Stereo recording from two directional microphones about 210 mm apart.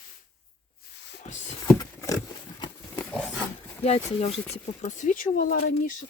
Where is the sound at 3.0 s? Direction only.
5° left (ahead or behind).